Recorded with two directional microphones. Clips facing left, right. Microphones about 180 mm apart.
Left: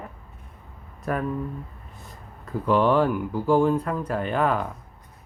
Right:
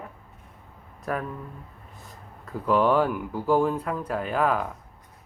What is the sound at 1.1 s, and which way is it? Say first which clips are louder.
Speech: left 2 dB; centre (ahead or behind).